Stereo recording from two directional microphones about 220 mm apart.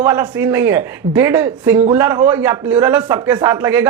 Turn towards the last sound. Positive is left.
turn(degrees=-10)  # may be behind; listen again after turning